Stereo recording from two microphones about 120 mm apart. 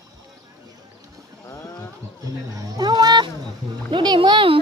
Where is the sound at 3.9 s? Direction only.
40° right (ahead or behind).